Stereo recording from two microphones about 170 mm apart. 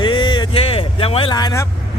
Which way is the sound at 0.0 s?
30° left (ahead or behind).